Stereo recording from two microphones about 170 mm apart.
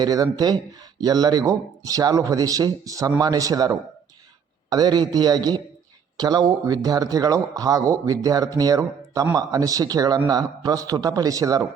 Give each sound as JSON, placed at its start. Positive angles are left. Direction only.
{"t": 0.0, "sound": "speech", "side_deg": -20}